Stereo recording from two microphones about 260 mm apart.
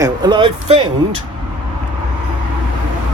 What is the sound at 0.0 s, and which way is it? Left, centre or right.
Speech, centre.